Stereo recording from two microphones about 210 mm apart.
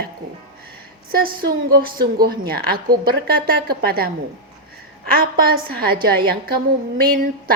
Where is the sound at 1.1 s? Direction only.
45° right (ahead or behind).